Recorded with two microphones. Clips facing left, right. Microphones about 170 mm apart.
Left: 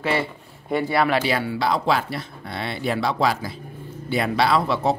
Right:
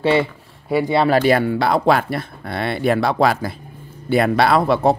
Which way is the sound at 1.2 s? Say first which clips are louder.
Right 7 dB; 50° right (ahead or behind).